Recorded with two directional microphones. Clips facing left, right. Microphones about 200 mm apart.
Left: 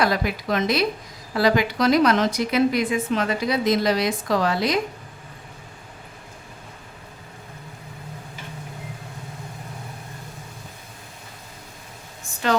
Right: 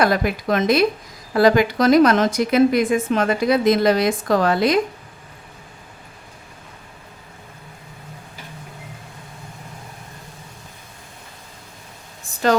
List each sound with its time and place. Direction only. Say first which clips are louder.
0.0 s a woman's voice: right 4 dB; 50° right (ahead or behind)